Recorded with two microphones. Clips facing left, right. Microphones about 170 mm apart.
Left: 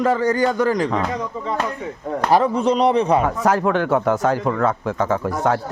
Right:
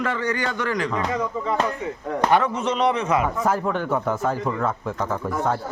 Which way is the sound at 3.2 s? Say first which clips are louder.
Left 4 dB; 85° left.